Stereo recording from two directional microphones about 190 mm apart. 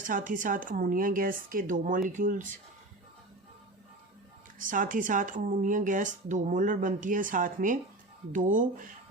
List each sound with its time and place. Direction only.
0.1 s speech: 45° right (ahead or behind)
4.6 s speech: 45° right (ahead or behind)